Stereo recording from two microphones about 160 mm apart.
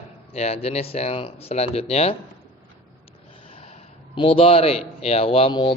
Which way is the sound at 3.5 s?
35° left (ahead or behind).